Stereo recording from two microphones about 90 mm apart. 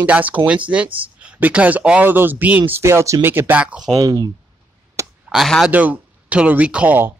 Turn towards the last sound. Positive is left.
turn(degrees=-15)  # may be behind; listen again after turning